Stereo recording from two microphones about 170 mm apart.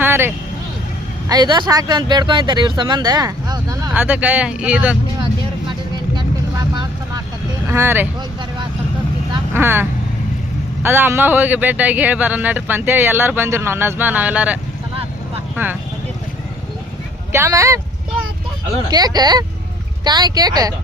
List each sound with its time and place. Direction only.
0.0 s vehicle: 10° right (ahead or behind)
1.3 s speech: 25° right (ahead or behind); by 4.9 s 5° right (ahead or behind)
5.2 s vehicle: 25° right (ahead or behind)
7.7 s a man's voice: 15° right (ahead or behind)
9.5 s speech: 15° right (ahead or behind)
10.8 s a man's voice: 15° right (ahead or behind)
17.3 s a man's voice: 15° right (ahead or behind)
18.9 s speech: 25° right (ahead or behind)